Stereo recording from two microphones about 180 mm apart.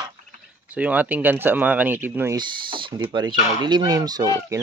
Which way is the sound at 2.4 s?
25° right (ahead or behind).